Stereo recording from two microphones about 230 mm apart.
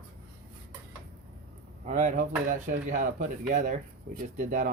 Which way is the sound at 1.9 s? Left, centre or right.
Right.